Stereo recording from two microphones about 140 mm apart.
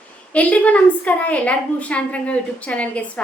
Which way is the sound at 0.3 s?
10° left (ahead or behind).